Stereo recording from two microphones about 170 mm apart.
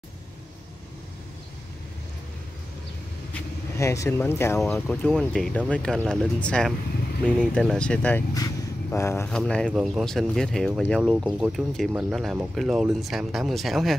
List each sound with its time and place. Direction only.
3.7 s speech: 15° left (ahead or behind)
4.6 s speech: 5° left (ahead or behind)
9.3 s speech: 5° left (ahead or behind)